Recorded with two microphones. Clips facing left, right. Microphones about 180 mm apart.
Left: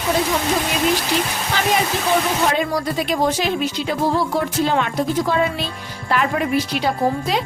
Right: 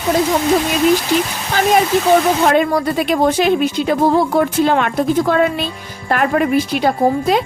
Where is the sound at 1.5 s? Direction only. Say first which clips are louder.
Right 7 dB; 45° right (ahead or behind).